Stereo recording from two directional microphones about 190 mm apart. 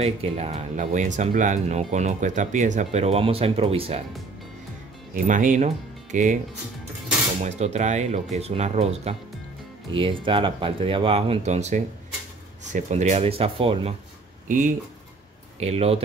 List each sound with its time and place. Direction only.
0.0 s speech: 35° right (ahead or behind)
5.1 s speech: 45° right (ahead or behind)
7.4 s speech: 35° right (ahead or behind)
14.5 s speech: 40° right (ahead or behind)